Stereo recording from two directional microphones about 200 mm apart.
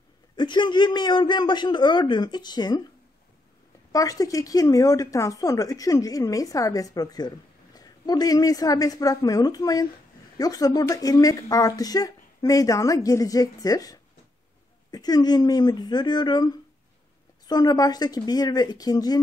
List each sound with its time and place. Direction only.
0.4 s a man's voice: 20° left (ahead or behind)
3.9 s a man's voice: 15° left (ahead or behind)
17.5 s a man's voice: 20° left (ahead or behind)